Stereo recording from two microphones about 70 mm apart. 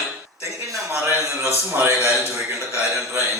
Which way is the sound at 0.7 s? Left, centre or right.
Right.